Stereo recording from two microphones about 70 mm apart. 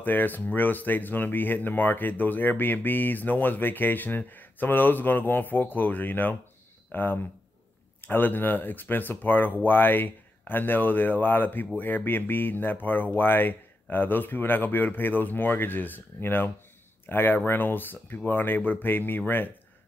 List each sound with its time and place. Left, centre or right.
0.0 s speech: left